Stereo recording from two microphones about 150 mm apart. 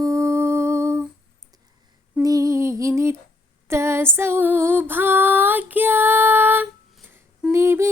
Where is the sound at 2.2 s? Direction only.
20° right (ahead or behind).